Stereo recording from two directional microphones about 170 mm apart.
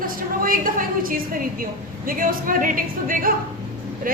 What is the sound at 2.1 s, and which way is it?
A woman's voice, 55° right (ahead or behind).